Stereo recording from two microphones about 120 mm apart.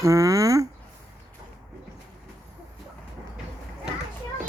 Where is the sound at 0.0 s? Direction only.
25° right (ahead or behind).